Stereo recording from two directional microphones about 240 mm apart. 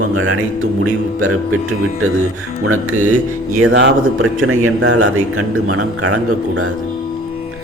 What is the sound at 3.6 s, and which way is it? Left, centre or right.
Speech, right.